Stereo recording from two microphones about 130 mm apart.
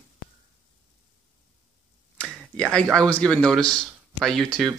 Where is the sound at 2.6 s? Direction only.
5° left (ahead or behind).